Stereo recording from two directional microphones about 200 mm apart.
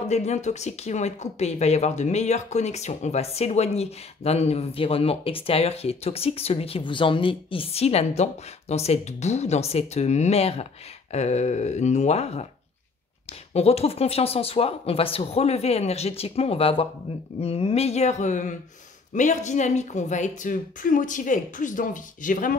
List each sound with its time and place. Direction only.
0.1 s speech: 35° left (ahead or behind)
13.5 s speech: 30° left (ahead or behind)